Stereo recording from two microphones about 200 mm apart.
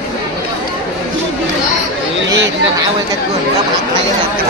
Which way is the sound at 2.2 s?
65° right (ahead or behind).